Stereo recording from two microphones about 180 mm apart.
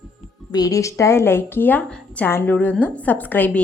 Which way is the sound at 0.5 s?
20° left (ahead or behind).